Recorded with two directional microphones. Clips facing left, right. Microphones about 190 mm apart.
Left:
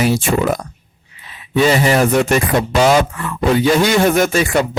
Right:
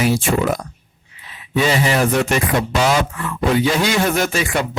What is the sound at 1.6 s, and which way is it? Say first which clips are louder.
A man's voice: left 4 dB; 45° left (ahead or behind).